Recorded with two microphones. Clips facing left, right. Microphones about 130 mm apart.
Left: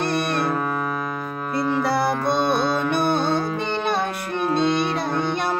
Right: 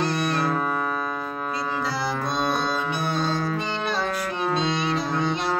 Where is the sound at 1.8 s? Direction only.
60° left (ahead or behind).